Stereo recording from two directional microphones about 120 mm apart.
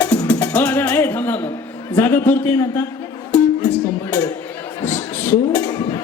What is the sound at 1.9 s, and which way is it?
Speech, 15° left (ahead or behind).